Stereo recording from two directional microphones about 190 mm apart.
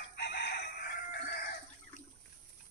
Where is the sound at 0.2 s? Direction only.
60° left (ahead or behind).